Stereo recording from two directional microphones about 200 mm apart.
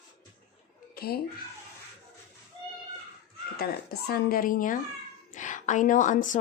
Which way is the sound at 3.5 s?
50° left (ahead or behind).